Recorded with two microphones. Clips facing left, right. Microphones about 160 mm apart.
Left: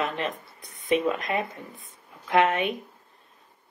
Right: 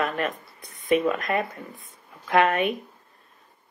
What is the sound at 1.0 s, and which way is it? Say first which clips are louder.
Speech: right 2 dB; 20° left (ahead or behind).